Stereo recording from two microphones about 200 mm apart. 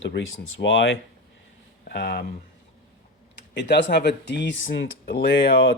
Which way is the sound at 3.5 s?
60° left (ahead or behind).